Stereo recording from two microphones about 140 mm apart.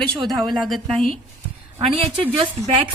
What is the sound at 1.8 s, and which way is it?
Speech, 40° right (ahead or behind).